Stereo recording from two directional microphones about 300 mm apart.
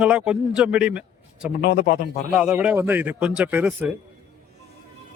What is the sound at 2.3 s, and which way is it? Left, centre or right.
A man's voice, centre.